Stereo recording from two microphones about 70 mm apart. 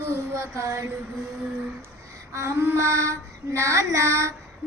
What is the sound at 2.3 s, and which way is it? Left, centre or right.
Child singing, right.